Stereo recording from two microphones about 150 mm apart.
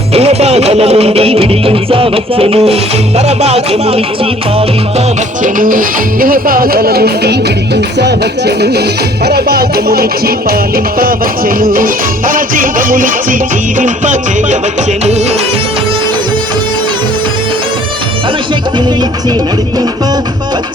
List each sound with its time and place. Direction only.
0.1 s music: 45° right (ahead or behind)
5.4 s speech: 65° right (ahead or behind)
13.7 s music: 55° right (ahead or behind)